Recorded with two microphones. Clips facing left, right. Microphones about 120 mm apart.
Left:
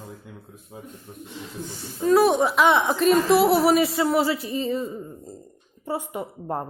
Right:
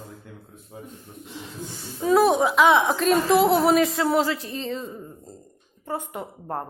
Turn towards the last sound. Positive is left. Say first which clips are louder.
# left 2 dB
turn(degrees=5)  # may be behind; listen again after turning